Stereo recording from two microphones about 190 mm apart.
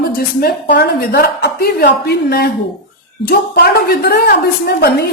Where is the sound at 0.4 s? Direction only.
55° left (ahead or behind).